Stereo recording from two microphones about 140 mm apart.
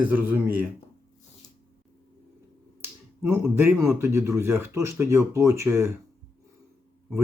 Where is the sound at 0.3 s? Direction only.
10° right (ahead or behind).